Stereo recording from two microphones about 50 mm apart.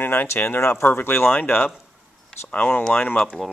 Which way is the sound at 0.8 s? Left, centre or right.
Left.